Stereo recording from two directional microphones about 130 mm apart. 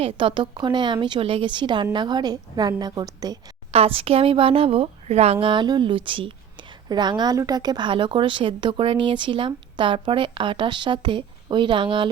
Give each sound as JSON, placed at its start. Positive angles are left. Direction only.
{"t": 0.0, "sound": "speech", "side_deg": -40}
{"t": 3.7, "sound": "speech", "side_deg": -50}